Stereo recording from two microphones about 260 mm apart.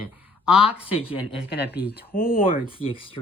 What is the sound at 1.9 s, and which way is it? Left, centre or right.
Speech, left.